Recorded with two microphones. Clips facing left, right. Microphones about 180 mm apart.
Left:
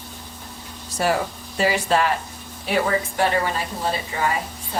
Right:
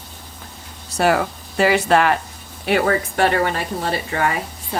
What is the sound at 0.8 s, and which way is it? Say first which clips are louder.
Speech: right 4 dB; 70° right (ahead or behind).